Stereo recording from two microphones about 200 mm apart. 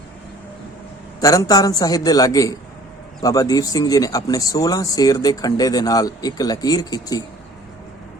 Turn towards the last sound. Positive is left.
turn(degrees=20)  # may be behind; listen again after turning